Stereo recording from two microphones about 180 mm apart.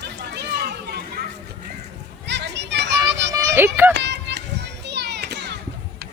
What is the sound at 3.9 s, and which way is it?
Children playing, 75° right (ahead or behind).